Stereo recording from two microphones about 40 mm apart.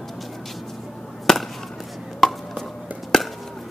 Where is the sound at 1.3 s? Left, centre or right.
Centre.